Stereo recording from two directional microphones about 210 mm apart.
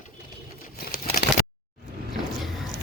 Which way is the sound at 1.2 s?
50° left (ahead or behind).